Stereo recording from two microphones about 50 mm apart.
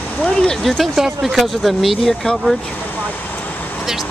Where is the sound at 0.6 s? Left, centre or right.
Centre.